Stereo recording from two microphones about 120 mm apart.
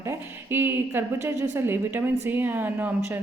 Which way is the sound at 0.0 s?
20° right (ahead or behind).